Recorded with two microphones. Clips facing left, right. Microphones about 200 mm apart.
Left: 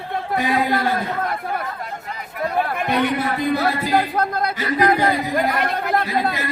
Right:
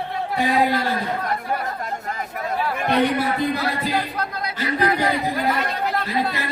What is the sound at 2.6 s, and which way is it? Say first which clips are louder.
Chatter: left 4 dB; 55° left (ahead or behind).